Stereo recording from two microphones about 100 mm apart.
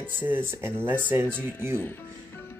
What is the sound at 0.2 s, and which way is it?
Speech, 20° right (ahead or behind).